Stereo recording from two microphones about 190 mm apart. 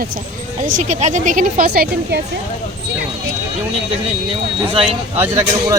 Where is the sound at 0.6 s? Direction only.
40° right (ahead or behind).